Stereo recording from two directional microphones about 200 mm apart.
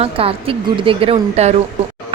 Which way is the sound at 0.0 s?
30° right (ahead or behind).